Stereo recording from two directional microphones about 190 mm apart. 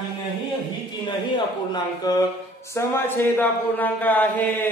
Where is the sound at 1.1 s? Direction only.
25° left (ahead or behind).